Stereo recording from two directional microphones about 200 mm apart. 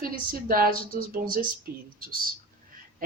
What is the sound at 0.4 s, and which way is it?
Speech, 45° right (ahead or behind).